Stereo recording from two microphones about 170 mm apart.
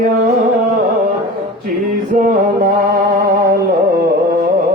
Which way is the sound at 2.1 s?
55° right (ahead or behind).